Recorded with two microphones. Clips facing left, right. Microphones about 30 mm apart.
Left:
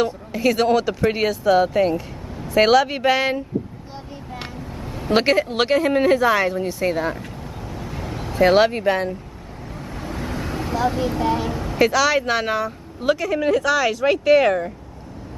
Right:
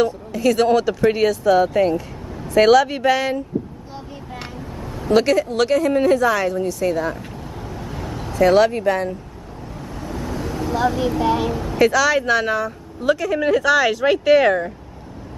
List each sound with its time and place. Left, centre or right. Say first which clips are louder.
0.0 s speech: right 2 dB; centre
4.9 s speech: right 1 dB; left
7.7 s vehicle: even; centre
8.1 s speech: right 1 dB; left
9.9 s vehicle: right 1 dB; left
11.6 s speech: right 1 dB; centre